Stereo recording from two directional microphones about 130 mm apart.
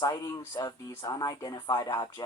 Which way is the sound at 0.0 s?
25° left (ahead or behind).